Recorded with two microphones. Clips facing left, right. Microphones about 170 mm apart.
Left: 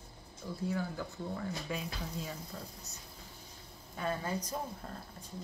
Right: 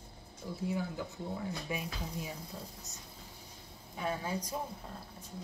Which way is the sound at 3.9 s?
10° right (ahead or behind).